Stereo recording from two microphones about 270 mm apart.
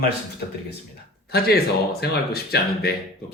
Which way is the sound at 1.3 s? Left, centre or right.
Left.